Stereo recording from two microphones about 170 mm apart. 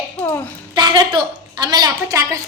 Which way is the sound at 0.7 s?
25° right (ahead or behind).